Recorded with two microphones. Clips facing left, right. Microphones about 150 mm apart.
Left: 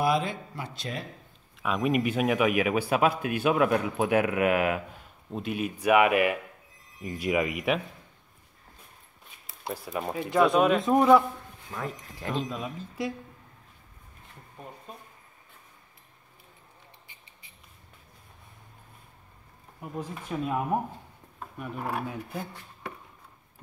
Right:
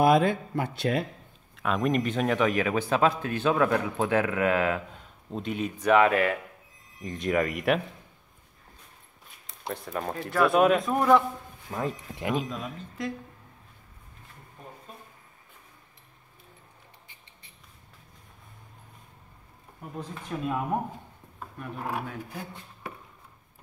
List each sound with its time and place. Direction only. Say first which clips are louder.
0.0 s speech: right 5 dB; 55° right (ahead or behind)
1.6 s a man's voice: even; 5° left (ahead or behind)
9.5 s speech: even; 5° left (ahead or behind)
10.9 s a man's voice: left 2 dB; 10° left (ahead or behind)
11.7 s speech: right 4 dB; 20° right (ahead or behind)
12.4 s speech: left 1 dB; centre (ahead or behind)
19.8 s a man's voice: left 2 dB; 10° left (ahead or behind)